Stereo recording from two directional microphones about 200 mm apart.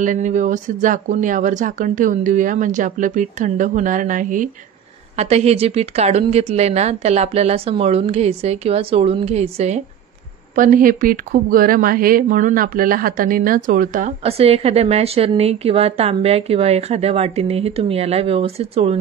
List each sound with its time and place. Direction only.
0.0 s speech: 40° right (ahead or behind)